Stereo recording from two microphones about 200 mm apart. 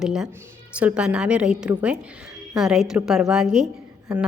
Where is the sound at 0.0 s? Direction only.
Centre (ahead or behind).